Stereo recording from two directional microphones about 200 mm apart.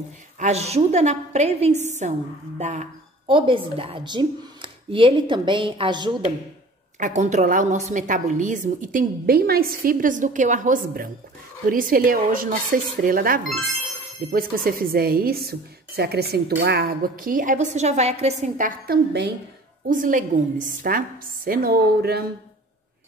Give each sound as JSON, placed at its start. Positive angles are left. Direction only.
{"t": 0.4, "sound": "a woman's voice", "side_deg": -35}
{"t": 7.0, "sound": "a woman's voice", "side_deg": -35}
{"t": 18.9, "sound": "a woman's voice", "side_deg": -55}
{"t": 19.9, "sound": "a woman's voice", "side_deg": -40}